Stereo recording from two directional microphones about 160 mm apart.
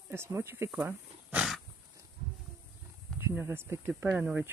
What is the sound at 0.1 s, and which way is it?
Speech, 15° right (ahead or behind).